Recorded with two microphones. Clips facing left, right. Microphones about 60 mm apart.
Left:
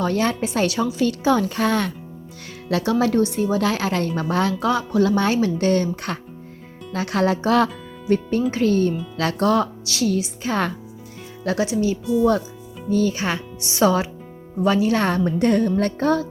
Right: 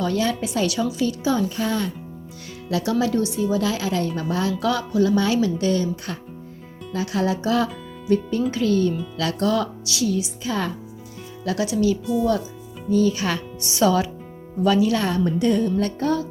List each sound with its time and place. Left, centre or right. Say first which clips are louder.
0.0 s speech: left 2 dB; left
1.0 s speech: left 4 dB; left
2.6 s a woman's voice: left 2 dB; left
4.6 s music: left 2 dB; left
4.9 s a woman's voice: even; left
5.1 s a woman's voice: left 1 dB; left
8.0 s speech: left 1 dB; left
11.4 s speech: even; left
12.9 s a woman's voice: right 1 dB; left
13.1 s a woman's voice: even; left